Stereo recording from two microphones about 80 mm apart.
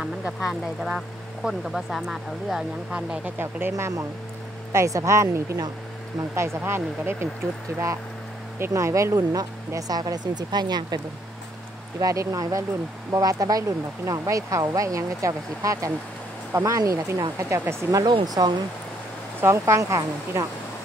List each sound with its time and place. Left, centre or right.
0.0 s speech: centre
3.3 s speech: right
3.7 s speech: right
8.5 s speech: right
12.0 s speech: right
18.0 s speech: right
19.4 s speech: right